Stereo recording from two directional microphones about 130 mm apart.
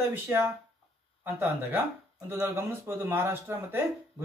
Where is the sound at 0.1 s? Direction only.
20° right (ahead or behind).